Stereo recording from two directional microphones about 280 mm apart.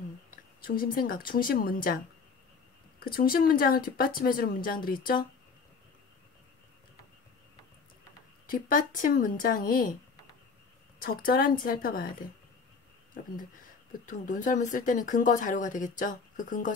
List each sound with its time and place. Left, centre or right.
0.6 s speech: left
3.0 s speech: left
8.5 s speech: left
11.1 s speech: left